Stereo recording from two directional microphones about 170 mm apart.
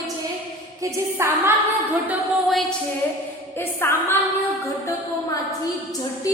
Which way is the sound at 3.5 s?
10° left (ahead or behind).